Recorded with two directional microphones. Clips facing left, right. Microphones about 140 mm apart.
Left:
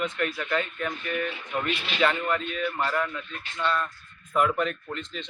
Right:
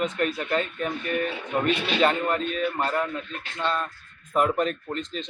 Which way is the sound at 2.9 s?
25° right (ahead or behind).